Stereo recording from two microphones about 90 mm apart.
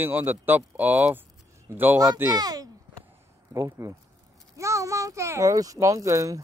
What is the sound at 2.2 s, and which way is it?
Speech, 45° right (ahead or behind).